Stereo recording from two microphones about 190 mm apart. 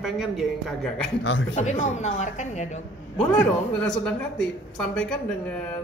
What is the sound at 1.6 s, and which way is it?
A woman's voice, 35° left (ahead or behind).